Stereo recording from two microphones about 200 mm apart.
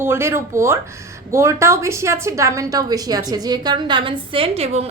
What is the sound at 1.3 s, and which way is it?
A woman's voice, 15° right (ahead or behind).